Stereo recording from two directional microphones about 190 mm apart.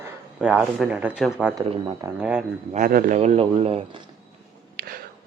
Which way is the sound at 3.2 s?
35° right (ahead or behind).